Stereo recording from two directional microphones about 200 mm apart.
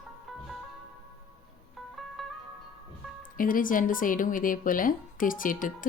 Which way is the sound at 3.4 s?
45° left (ahead or behind).